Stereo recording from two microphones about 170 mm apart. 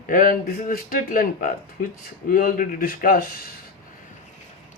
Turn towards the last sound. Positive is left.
turn(degrees=55)  # may be behind; listen again after turning